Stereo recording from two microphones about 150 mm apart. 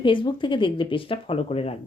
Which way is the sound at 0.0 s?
35° left (ahead or behind).